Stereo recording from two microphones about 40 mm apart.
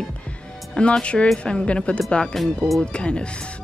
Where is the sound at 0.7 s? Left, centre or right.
Left.